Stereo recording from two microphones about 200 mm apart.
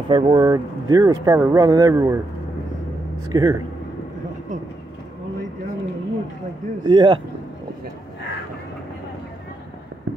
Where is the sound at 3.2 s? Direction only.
15° right (ahead or behind).